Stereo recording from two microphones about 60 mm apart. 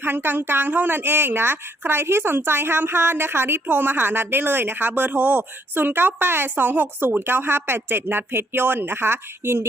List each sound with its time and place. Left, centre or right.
0.0 s speech: right